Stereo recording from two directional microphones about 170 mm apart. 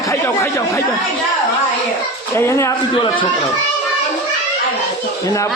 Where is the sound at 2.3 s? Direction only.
15° left (ahead or behind).